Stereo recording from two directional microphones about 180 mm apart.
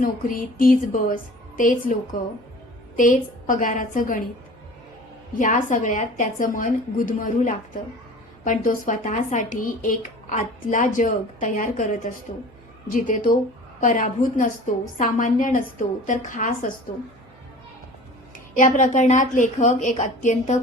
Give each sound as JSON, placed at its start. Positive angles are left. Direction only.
{"t": 0.0, "sound": "speech", "side_deg": 50}
{"t": 3.0, "sound": "speech", "side_deg": 45}
{"t": 5.3, "sound": "speech", "side_deg": 45}
{"t": 18.5, "sound": "speech", "side_deg": 45}